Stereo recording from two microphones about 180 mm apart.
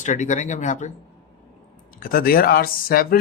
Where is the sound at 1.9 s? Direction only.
55° left (ahead or behind).